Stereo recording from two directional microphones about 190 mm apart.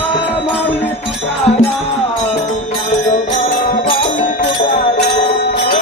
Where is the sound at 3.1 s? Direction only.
45° left (ahead or behind).